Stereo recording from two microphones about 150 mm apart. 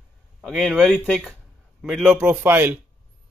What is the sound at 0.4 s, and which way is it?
A man's voice, centre (ahead or behind).